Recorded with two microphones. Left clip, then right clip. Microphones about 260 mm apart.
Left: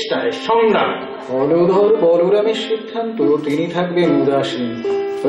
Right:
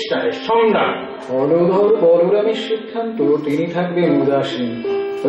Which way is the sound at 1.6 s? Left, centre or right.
Right.